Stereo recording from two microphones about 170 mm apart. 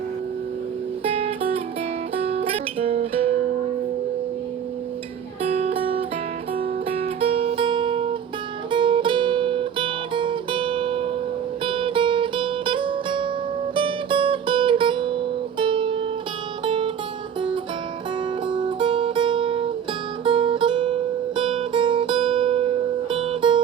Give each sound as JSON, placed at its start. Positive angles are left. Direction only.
{"t": 1.0, "sound": "music", "side_deg": -35}
{"t": 5.4, "sound": "music", "side_deg": -35}
{"t": 13.7, "sound": "guitar", "side_deg": -30}
{"t": 16.6, "sound": "music", "side_deg": -30}
{"t": 18.4, "sound": "music", "side_deg": -30}